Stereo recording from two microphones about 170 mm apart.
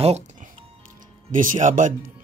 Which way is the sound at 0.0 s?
40° right (ahead or behind).